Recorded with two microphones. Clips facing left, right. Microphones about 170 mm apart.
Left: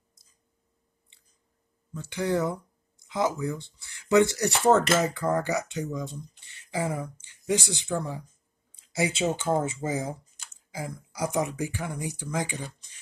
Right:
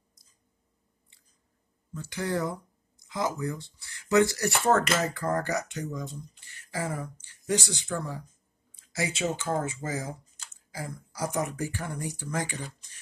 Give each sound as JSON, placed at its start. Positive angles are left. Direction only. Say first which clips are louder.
{"t": 2.0, "sound": "speech", "louder": "left 3 dB", "side_deg": 20}